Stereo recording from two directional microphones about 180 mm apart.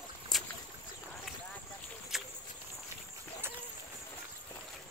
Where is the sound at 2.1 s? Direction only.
Centre (ahead or behind).